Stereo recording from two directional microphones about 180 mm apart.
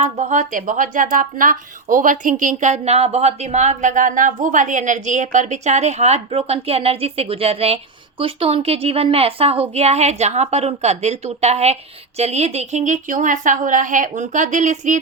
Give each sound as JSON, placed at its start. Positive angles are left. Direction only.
{"t": 0.2, "sound": "a woman's voice", "side_deg": -45}